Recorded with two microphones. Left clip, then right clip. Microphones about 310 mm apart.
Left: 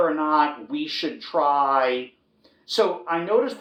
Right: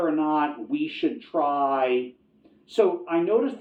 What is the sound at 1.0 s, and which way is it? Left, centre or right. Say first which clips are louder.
Speech: right 3 dB; left.